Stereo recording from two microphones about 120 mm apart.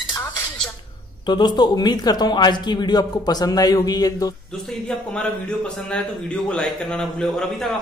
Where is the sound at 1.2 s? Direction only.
40° left (ahead or behind).